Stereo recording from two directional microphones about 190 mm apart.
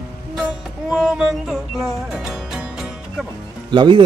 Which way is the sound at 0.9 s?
5° right (ahead or behind).